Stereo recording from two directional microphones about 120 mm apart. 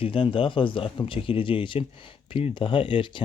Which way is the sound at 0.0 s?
50° left (ahead or behind).